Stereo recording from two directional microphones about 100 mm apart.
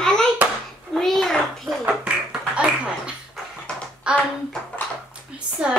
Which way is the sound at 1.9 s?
10° right (ahead or behind).